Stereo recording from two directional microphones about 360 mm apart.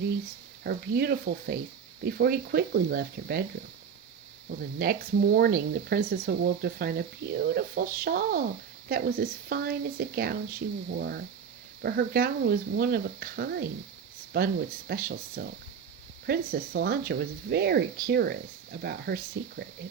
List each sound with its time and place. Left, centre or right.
0.6 s speech: right
4.4 s speech: right